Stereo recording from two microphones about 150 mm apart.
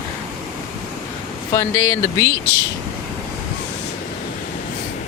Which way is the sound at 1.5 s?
20° left (ahead or behind).